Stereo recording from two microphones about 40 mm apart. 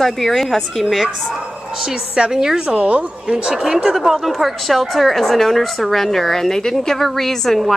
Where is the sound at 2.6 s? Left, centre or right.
Right.